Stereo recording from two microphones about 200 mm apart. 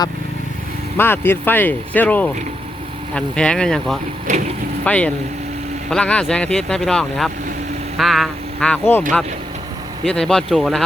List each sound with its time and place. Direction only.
0.9 s speech: 10° left (ahead or behind)
4.3 s speech: 35° right (ahead or behind)
4.9 s speech: 5° left (ahead or behind)